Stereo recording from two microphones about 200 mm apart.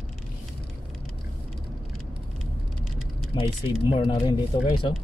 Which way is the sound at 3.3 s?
25° left (ahead or behind).